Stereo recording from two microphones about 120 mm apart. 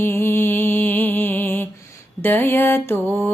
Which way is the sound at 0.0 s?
20° left (ahead or behind).